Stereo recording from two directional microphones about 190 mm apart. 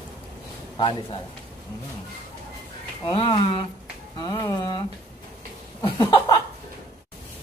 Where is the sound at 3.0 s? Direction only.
25° left (ahead or behind).